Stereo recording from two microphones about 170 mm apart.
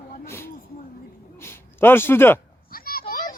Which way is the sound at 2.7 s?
60° left (ahead or behind).